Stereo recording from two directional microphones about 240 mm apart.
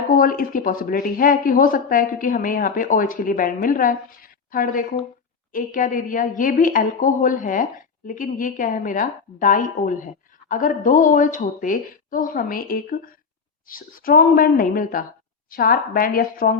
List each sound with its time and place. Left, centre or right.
0.1 s speech: left